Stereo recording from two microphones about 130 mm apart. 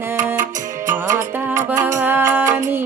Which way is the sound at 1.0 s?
75° right (ahead or behind).